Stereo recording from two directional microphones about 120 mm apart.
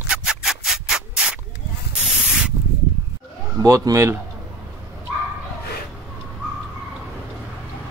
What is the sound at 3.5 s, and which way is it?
Speech, 30° right (ahead or behind).